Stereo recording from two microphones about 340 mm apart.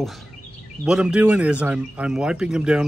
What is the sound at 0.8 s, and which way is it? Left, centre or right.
Speech, centre.